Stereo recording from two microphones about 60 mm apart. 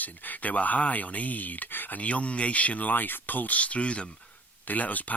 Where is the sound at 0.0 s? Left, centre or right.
Left.